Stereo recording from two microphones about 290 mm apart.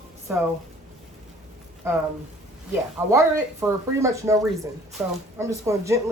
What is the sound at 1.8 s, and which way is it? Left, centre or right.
Speech, centre.